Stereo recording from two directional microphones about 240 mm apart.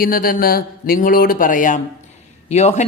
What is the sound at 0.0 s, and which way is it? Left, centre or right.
Speech, left.